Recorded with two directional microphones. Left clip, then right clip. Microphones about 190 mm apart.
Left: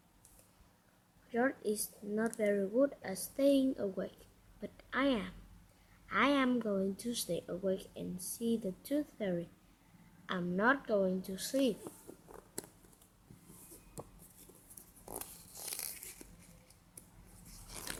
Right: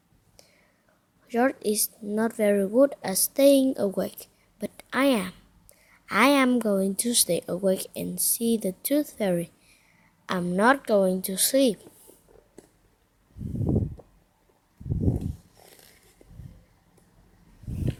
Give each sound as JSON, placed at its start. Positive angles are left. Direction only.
{"t": 1.3, "sound": "a woman's voice", "side_deg": -30}